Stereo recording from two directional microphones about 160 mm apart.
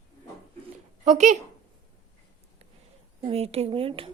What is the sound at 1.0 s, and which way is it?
Speech, 45° right (ahead or behind).